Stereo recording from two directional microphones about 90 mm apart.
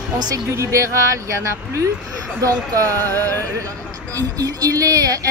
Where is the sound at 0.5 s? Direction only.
35° right (ahead or behind).